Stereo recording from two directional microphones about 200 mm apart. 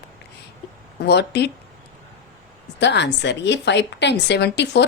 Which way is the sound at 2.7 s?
60° left (ahead or behind).